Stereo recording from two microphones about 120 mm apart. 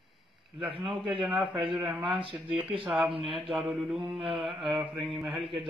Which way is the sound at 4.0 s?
45° right (ahead or behind).